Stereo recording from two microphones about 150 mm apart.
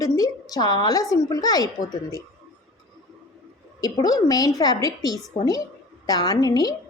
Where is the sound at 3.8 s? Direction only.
25° left (ahead or behind).